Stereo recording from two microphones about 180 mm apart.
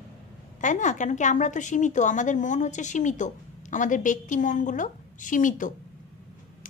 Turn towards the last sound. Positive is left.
turn(degrees=45)  # may be behind; listen again after turning